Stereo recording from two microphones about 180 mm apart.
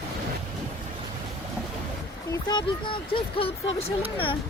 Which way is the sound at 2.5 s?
25° left (ahead or behind).